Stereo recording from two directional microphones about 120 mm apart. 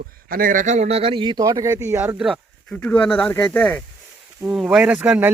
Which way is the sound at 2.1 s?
5° right (ahead or behind).